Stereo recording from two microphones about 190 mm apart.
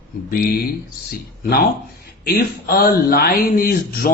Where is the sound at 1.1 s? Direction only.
55° left (ahead or behind).